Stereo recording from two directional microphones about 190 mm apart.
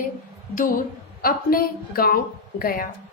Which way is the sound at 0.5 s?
45° left (ahead or behind).